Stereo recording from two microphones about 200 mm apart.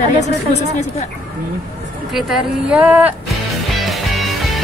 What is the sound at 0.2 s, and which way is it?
Speech, 35° left (ahead or behind).